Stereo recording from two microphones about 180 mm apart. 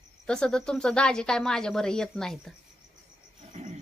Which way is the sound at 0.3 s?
5° left (ahead or behind).